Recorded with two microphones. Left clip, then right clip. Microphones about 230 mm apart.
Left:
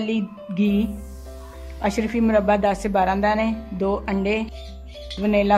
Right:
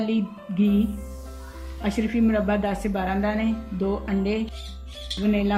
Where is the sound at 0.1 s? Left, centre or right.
Centre.